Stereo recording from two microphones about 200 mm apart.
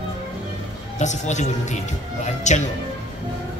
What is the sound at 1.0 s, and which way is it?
A man's voice, 35° left (ahead or behind).